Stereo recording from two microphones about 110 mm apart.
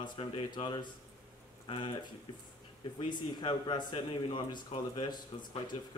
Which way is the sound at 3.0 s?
40° left (ahead or behind).